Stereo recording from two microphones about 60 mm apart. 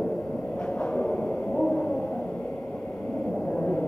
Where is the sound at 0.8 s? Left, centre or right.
Left.